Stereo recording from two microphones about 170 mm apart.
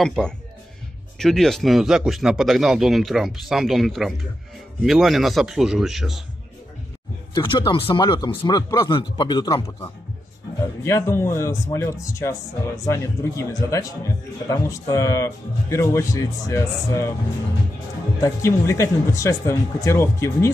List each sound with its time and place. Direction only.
0.0 s a man's voice: 5° left (ahead or behind)
7.3 s speech: 30° left (ahead or behind)
18.2 s speech: 15° left (ahead or behind)